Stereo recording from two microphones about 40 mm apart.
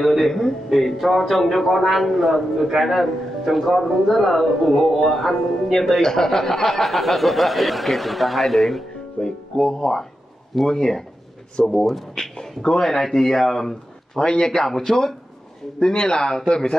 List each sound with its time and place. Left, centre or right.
0.0 s speech: centre
0.3 s speech: centre
9.2 s speech: centre
14.2 s speech: centre
15.9 s speech: left